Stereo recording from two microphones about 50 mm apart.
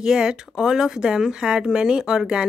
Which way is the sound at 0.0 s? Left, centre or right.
Centre.